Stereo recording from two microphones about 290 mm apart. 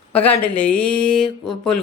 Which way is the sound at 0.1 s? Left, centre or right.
Centre.